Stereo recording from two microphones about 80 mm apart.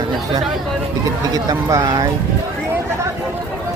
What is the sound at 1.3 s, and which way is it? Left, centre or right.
Speech, right.